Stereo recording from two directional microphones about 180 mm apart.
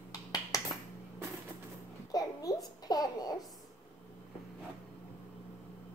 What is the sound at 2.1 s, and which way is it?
Babbling, 20° left (ahead or behind).